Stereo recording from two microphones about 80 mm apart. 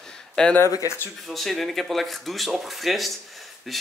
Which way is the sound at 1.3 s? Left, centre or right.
Centre.